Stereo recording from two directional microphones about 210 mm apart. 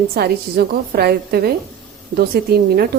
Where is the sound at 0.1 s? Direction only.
50° right (ahead or behind).